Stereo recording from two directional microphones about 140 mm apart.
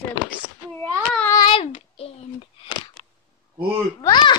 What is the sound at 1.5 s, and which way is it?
A child's voice, 40° left (ahead or behind).